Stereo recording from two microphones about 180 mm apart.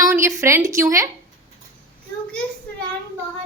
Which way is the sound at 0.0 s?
15° right (ahead or behind).